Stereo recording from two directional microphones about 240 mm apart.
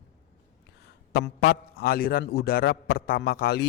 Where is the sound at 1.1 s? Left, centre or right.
Left.